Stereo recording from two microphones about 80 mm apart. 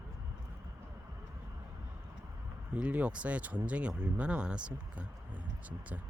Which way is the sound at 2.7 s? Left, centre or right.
Centre.